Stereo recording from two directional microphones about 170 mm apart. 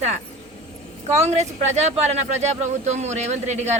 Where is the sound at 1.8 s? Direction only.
40° right (ahead or behind).